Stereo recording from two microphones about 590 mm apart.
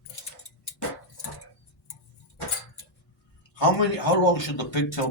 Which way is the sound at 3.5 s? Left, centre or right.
Left.